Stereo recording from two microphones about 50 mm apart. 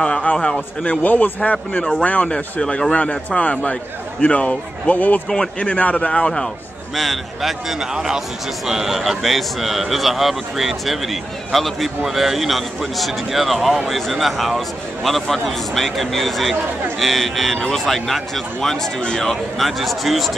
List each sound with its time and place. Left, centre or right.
0.0 s a man's voice: left
1.0 s speech: left
2.6 s a man's voice: centre
2.9 s a man's voice: left
7.0 s a man's voice: centre
7.8 s a man's voice: centre